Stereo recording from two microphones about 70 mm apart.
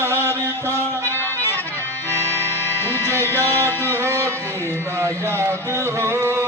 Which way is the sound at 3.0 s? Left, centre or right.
Right.